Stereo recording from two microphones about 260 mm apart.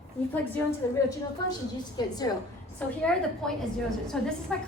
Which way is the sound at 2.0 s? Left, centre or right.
Centre.